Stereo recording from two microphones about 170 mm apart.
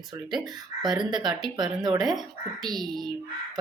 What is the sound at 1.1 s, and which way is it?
Speech, 25° right (ahead or behind).